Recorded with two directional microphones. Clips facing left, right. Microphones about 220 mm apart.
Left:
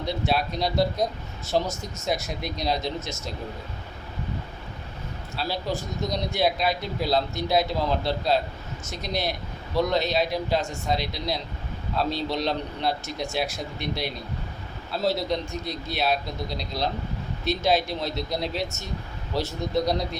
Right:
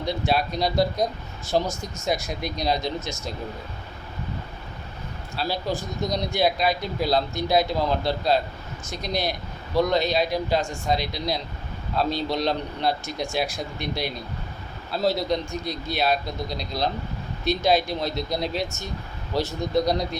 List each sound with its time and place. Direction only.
0.0 s speech: centre (ahead or behind)
1.6 s speech: 25° left (ahead or behind)
2.0 s speech: centre (ahead or behind)
5.4 s speech: centre (ahead or behind)